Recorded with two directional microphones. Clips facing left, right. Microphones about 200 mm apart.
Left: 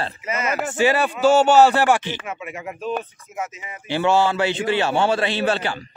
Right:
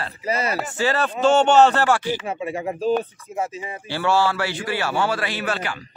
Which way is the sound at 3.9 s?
20° left (ahead or behind).